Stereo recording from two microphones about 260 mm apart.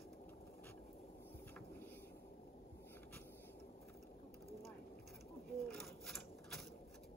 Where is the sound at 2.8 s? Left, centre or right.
Centre.